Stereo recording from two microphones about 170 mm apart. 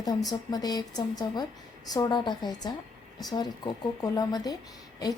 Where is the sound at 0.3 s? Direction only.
25° left (ahead or behind).